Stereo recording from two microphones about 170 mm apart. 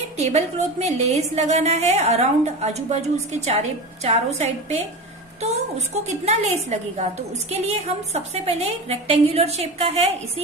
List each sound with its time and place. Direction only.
0.2 s a woman's voice: 40° right (ahead or behind)
4.0 s a woman's voice: 40° right (ahead or behind)